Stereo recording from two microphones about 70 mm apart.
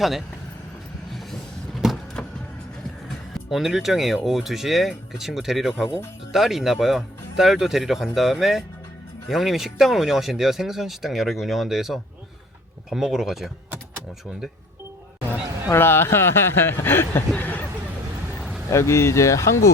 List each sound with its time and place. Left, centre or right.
2.2 s vehicle: centre
3.1 s speech: centre
15.7 s speech: left
17.3 s hubbub: left
18.3 s vehicle: centre
18.7 s speech: left